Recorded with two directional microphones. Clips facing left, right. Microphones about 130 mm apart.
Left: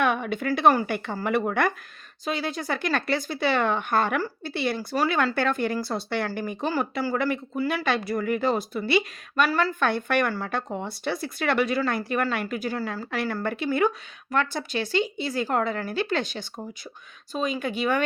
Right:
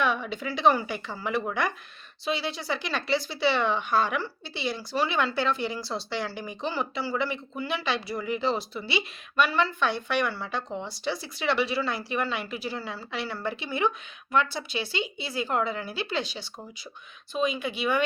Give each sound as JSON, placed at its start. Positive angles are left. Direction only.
{"t": 0.0, "sound": "speech", "side_deg": 55}